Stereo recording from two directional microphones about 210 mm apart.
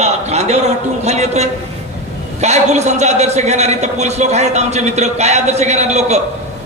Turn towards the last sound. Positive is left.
turn(degrees=-30)  # may be behind; listen again after turning